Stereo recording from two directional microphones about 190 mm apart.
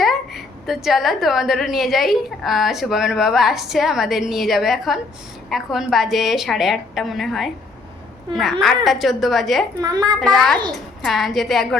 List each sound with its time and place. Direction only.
0.0 s a woman's voice: centre (ahead or behind)
8.6 s a woman's voice: centre (ahead or behind)
9.8 s a child's voice: 20° right (ahead or behind)
10.2 s a woman's voice: centre (ahead or behind)